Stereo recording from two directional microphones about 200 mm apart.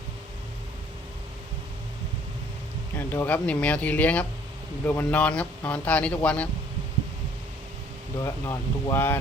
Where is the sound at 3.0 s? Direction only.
10° left (ahead or behind).